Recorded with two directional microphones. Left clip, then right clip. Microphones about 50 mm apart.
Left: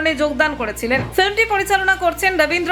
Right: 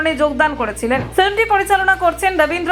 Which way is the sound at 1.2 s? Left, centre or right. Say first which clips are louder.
Right 3 dB; right.